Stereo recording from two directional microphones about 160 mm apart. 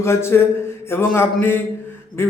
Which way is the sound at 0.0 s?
15° left (ahead or behind).